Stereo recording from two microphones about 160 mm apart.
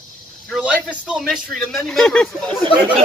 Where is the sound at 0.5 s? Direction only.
5° right (ahead or behind).